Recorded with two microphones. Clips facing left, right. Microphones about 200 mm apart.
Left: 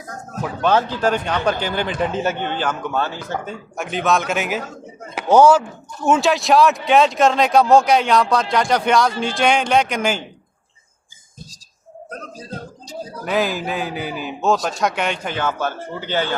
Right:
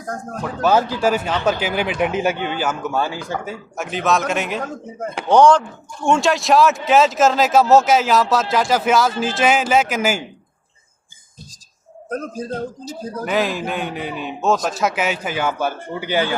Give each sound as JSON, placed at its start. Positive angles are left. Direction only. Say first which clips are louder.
{"t": 0.0, "sound": "speech", "louder": "right 6 dB", "side_deg": -50}
{"t": 0.6, "sound": "speech", "louder": "right 1 dB", "side_deg": -10}
{"t": 4.6, "sound": "speech", "louder": "right 7 dB", "side_deg": -50}
{"t": 5.1, "sound": "speech", "louder": "left 1 dB", "side_deg": 5}
{"t": 12.0, "sound": "speech", "louder": "right 9 dB", "side_deg": -50}
{"t": 12.8, "sound": "speech", "louder": "right 3 dB", "side_deg": 0}